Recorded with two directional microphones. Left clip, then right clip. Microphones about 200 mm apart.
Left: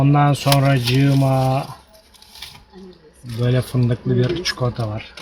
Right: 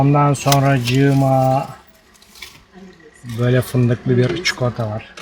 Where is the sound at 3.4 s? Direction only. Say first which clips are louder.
Right 4 dB; 25° right (ahead or behind).